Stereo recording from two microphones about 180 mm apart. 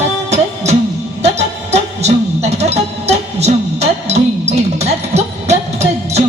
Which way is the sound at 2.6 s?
35° right (ahead or behind).